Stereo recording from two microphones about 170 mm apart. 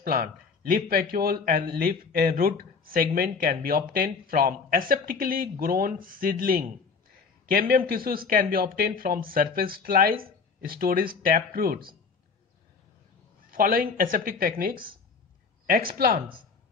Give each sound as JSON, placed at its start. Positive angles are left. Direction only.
{"t": 0.0, "sound": "a man's voice", "side_deg": -60}
{"t": 13.5, "sound": "a man's voice", "side_deg": -55}